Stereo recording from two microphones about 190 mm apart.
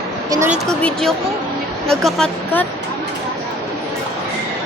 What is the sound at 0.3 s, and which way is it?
Speech, 15° right (ahead or behind).